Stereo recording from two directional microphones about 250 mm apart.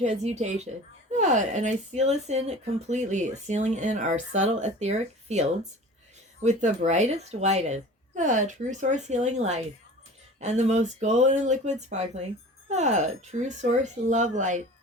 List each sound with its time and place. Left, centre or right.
0.0 s speech: right